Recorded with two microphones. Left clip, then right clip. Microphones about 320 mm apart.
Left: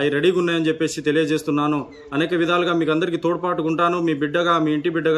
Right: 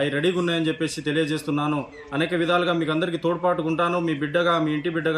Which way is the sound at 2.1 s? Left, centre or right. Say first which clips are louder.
Left 2 dB; centre.